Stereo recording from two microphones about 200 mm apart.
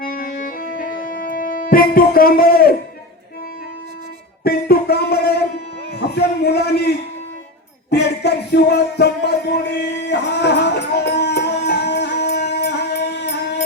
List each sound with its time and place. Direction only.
0.0 s music: 45° left (ahead or behind)
4.4 s music: 50° left (ahead or behind)
6.1 s a sound: 55° left (ahead or behind)
7.9 s music: 55° left (ahead or behind)